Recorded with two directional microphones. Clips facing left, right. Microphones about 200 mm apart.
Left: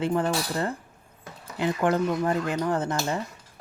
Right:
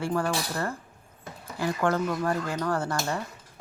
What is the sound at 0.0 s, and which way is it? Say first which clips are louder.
Speech: left 3 dB; 20° left (ahead or behind).